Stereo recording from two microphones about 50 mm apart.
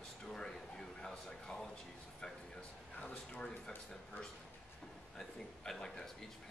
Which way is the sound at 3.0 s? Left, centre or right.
Left.